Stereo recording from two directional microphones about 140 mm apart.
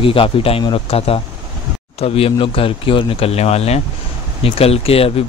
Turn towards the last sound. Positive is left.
turn(degrees=45)  # may be behind; listen again after turning